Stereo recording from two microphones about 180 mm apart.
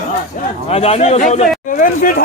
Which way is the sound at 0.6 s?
35° left (ahead or behind).